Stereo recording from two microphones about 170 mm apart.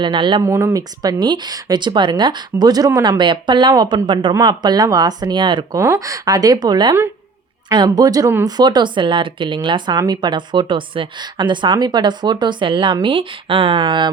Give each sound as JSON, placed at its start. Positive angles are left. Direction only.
{"t": 0.0, "sound": "speech", "side_deg": -25}
{"t": 0.4, "sound": "speech", "side_deg": -15}
{"t": 5.8, "sound": "speech", "side_deg": -15}